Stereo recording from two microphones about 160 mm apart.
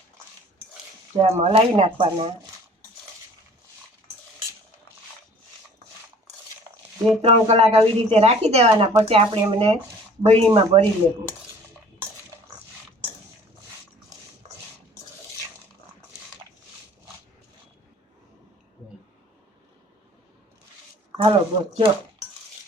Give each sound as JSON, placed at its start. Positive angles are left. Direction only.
{"t": 1.2, "sound": "speech", "side_deg": -40}
{"t": 7.2, "sound": "speech", "side_deg": -40}
{"t": 14.4, "sound": "a sound", "side_deg": -45}
{"t": 21.2, "sound": "speech", "side_deg": -30}